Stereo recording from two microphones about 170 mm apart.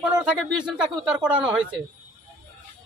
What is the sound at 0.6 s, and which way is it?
Speech, 5° right (ahead or behind).